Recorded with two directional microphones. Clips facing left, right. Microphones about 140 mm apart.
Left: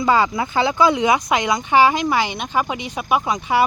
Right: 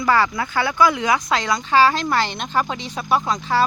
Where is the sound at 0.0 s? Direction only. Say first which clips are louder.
Left 1 dB; 20° left (ahead or behind).